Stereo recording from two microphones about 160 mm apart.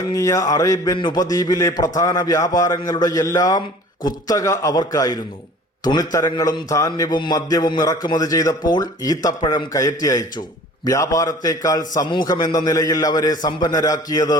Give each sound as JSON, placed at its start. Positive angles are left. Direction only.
{"t": 0.1, "sound": "a man's voice", "side_deg": 20}